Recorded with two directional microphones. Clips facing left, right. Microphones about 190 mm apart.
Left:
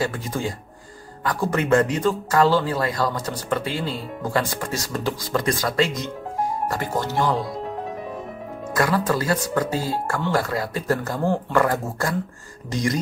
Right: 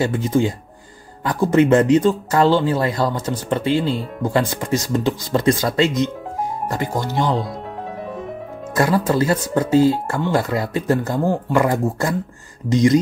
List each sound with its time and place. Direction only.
0.0 s speech: 25° right (ahead or behind)
8.7 s speech: 25° right (ahead or behind)